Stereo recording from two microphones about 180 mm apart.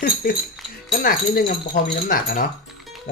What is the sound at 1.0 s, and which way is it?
Speech, 55° left (ahead or behind).